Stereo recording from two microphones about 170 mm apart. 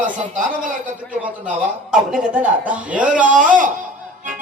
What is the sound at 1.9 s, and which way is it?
A man's voice, 5° right (ahead or behind).